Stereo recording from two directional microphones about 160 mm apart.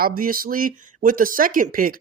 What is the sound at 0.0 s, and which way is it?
Speech, 65° right (ahead or behind).